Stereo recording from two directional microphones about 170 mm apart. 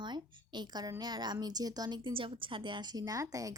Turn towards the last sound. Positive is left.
turn(degrees=-20)  # may be behind; listen again after turning